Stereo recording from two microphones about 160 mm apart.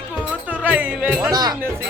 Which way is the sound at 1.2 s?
25° right (ahead or behind).